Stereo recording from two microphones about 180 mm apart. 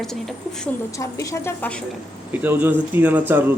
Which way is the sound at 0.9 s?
15° left (ahead or behind).